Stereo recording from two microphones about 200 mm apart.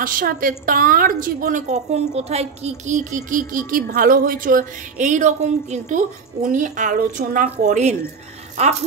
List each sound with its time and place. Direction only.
0.0 s a woman's voice: 45° right (ahead or behind)